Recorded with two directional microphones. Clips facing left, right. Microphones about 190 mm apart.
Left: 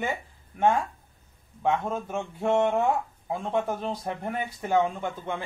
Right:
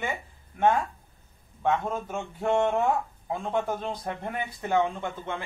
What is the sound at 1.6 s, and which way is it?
Speech, 10° left (ahead or behind).